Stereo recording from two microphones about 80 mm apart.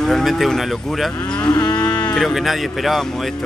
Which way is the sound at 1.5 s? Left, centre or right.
Left.